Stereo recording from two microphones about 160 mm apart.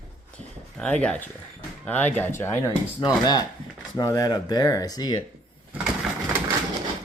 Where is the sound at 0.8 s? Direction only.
5° left (ahead or behind).